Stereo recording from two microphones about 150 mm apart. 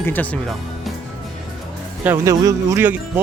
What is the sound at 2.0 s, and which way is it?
Speech, 20° right (ahead or behind).